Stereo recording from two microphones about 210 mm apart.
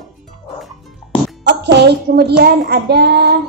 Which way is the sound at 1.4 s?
55° right (ahead or behind).